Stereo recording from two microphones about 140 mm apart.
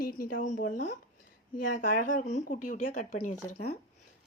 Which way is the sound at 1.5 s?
80° left.